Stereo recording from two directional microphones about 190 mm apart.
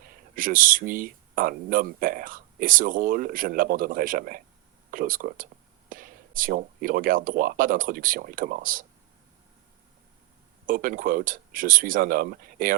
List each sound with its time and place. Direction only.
0.0 s speech: 45° right (ahead or behind)
10.7 s speech: 45° right (ahead or behind)